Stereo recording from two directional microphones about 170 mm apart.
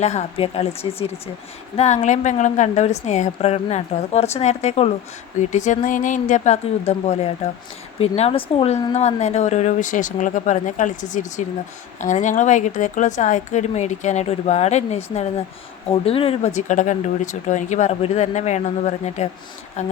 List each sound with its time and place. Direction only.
0.0 s a woman's voice: 40° left (ahead or behind)